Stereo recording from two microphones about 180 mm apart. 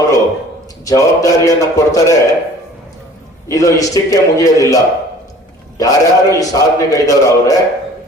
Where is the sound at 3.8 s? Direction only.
20° left (ahead or behind).